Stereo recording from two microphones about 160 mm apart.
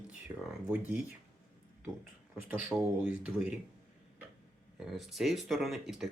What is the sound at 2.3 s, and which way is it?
Speech, 5° right (ahead or behind).